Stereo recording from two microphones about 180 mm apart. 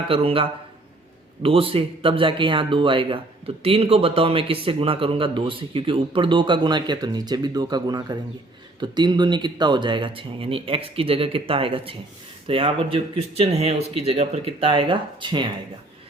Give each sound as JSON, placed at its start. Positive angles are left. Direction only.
{"t": 0.1, "sound": "speech", "side_deg": -30}